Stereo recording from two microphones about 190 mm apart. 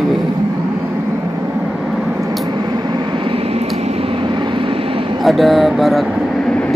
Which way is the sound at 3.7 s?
35° right (ahead or behind).